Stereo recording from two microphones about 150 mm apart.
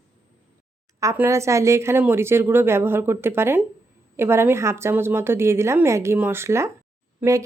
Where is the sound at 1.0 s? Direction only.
20° right (ahead or behind).